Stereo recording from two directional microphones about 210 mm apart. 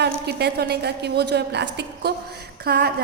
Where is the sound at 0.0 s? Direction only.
50° right (ahead or behind).